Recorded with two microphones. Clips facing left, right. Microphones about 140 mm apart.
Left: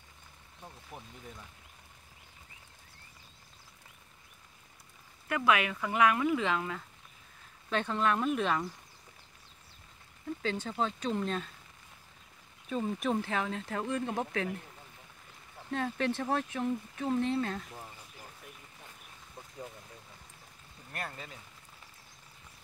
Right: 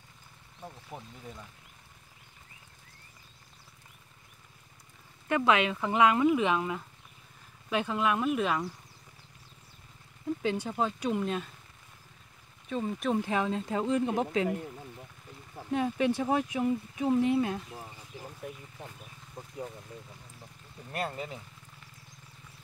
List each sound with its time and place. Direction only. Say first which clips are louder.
0.9 s speech: right 3 dB; 30° right (ahead or behind)
5.3 s speech: right 3 dB; 25° right (ahead or behind)
7.7 s speech: right 1 dB; 5° right (ahead or behind)
10.4 s speech: right 2 dB; 15° right (ahead or behind)
12.6 s speech: right 1 dB; centre (ahead or behind)
13.2 s speech: right 4 dB; 15° right (ahead or behind)
15.7 s speech: right 4 dB; 10° right (ahead or behind)
20.9 s speech: right 7 dB; 20° right (ahead or behind)